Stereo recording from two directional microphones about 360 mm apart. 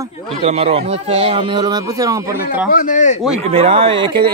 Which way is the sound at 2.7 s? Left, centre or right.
Left.